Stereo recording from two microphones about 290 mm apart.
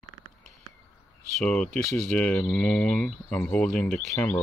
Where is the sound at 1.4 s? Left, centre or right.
Centre.